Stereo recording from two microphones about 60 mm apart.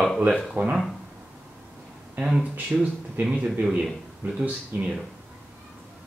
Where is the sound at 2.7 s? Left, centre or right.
Centre.